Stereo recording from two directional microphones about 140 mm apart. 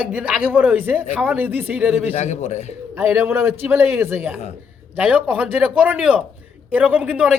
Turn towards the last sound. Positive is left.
turn(degrees=-5)  # may be behind; listen again after turning